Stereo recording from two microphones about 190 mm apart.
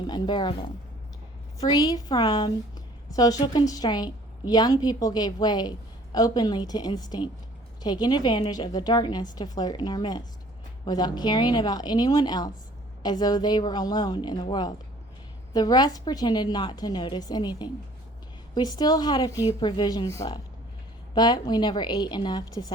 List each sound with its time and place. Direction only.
0.1 s a woman's voice: 25° left (ahead or behind)
1.7 s a woman's voice: 20° left (ahead or behind)